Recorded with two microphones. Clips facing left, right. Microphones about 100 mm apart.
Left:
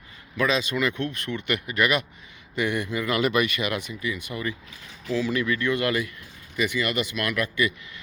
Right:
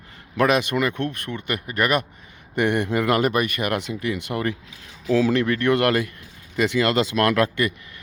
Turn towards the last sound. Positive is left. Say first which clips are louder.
# right 7 dB
turn(degrees=-80)